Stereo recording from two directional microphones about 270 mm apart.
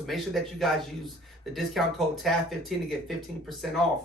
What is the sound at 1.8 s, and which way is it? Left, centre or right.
Speech, centre.